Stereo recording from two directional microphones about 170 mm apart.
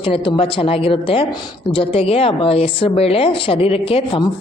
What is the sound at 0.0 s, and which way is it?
A woman's voice, 30° left (ahead or behind).